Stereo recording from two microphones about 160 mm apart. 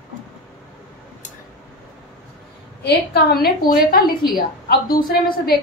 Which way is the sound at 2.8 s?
90° left.